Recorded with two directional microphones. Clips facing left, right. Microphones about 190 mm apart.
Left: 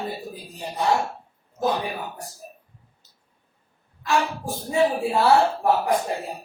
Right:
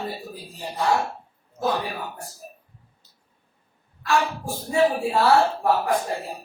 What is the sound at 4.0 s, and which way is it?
Speech, 15° left (ahead or behind).